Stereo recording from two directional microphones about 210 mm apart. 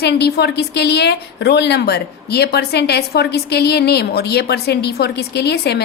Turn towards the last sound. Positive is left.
turn(degrees=50)  # may be behind; listen again after turning